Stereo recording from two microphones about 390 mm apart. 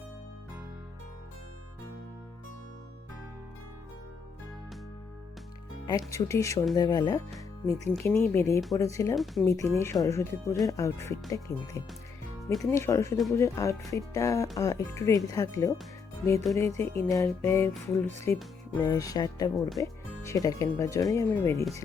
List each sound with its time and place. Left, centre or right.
5.9 s speech: centre